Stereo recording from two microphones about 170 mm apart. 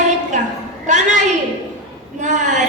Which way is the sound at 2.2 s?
45° right (ahead or behind).